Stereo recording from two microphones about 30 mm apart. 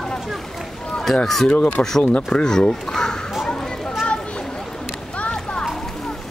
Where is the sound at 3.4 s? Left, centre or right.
Left.